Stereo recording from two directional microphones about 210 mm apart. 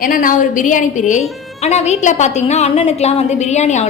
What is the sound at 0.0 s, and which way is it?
A woman's voice, 40° left (ahead or behind).